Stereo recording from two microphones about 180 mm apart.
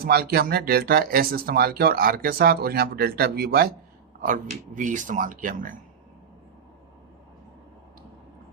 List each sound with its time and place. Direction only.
0.0 s speech: 55° right (ahead or behind)
4.2 s speech: 50° right (ahead or behind)